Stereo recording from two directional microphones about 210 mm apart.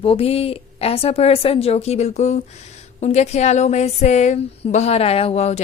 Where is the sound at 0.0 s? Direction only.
25° left (ahead or behind).